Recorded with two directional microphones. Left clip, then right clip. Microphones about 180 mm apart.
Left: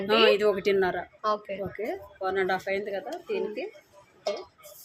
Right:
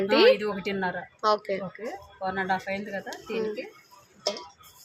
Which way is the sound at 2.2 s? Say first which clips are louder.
Left 1 dB; 60° left (ahead or behind).